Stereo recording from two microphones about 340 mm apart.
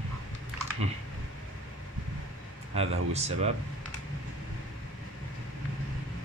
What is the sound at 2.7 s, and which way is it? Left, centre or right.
Speech, centre.